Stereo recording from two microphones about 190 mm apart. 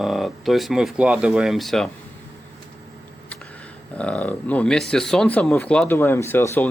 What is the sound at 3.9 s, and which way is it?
Speech, 5° left (ahead or behind).